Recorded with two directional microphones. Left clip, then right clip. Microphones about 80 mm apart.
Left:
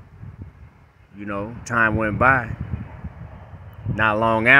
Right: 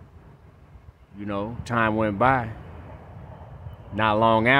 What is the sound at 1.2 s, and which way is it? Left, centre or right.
Speech, right.